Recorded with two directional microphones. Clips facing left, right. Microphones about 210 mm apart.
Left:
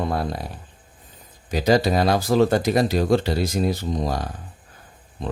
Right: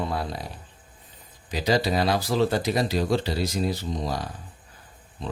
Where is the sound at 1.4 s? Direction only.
50° left (ahead or behind).